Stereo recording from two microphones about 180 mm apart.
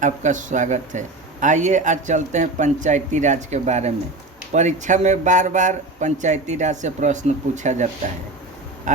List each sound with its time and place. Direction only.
0.0 s a man's voice: 45° right (ahead or behind)